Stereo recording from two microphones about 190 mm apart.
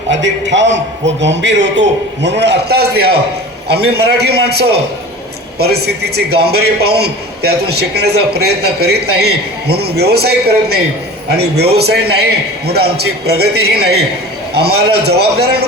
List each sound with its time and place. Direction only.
0.1 s a man's voice: 70° right (ahead or behind)
11.3 s a man's voice: 60° right (ahead or behind)